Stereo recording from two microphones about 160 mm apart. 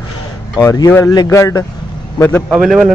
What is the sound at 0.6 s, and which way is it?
Speech, 20° left (ahead or behind).